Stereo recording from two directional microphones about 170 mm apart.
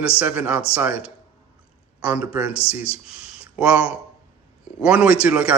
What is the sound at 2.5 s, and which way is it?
Speech, 35° left (ahead or behind).